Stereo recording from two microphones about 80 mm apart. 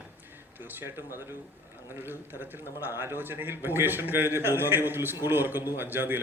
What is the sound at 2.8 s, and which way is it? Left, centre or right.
A man's voice, right.